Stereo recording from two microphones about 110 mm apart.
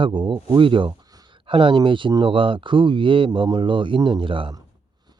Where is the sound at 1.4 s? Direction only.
50° right (ahead or behind).